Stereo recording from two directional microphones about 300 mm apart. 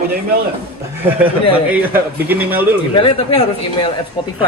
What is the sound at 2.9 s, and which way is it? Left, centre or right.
Speech, centre.